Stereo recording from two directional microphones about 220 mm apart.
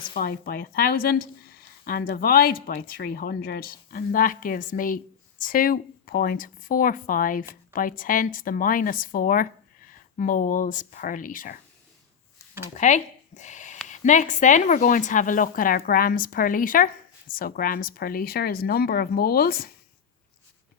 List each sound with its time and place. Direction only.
0.1 s speech: 40° left (ahead or behind)
12.7 s speech: 30° left (ahead or behind)